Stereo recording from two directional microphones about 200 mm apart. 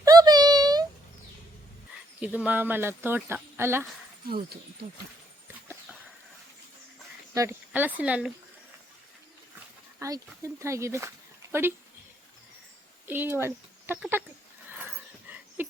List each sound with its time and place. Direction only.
0.0 s a sound: 20° right (ahead or behind)
2.2 s speech: 10° right (ahead or behind)
4.3 s speech: 50° right (ahead or behind)
7.3 s speech: 10° right (ahead or behind)
10.0 s speech: 15° right (ahead or behind)
13.1 s speech: 10° right (ahead or behind)
14.9 s dog: 10° right (ahead or behind)